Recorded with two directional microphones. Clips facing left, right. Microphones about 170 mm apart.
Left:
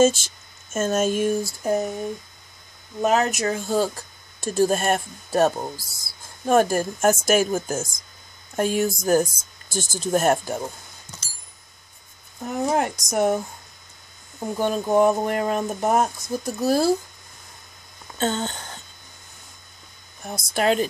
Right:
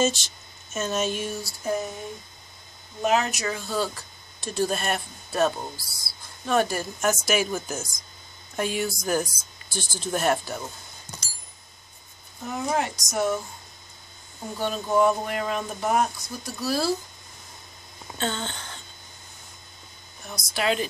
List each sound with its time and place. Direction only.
0.0 s speech: 50° left (ahead or behind)
1.6 s a sound: 40° left (ahead or behind)
3.0 s speech: 45° left (ahead or behind)
12.7 s speech: 50° left (ahead or behind)
14.6 s speech: 50° left (ahead or behind)
18.1 s speech: 40° left (ahead or behind)
20.2 s speech: 45° left (ahead or behind)